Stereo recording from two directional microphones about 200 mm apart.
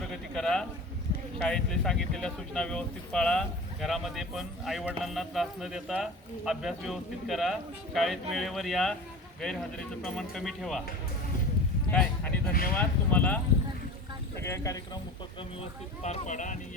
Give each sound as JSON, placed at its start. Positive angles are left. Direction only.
{"t": 0.1, "sound": "a sound", "side_deg": 5}
{"t": 1.4, "sound": "speech", "side_deg": 5}
{"t": 11.9, "sound": "speech", "side_deg": 5}
{"t": 16.0, "sound": "speech", "side_deg": 35}